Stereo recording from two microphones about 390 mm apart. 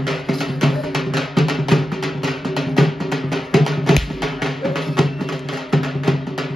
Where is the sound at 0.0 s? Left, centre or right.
Centre.